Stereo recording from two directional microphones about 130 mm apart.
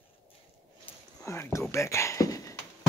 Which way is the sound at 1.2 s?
20° left (ahead or behind).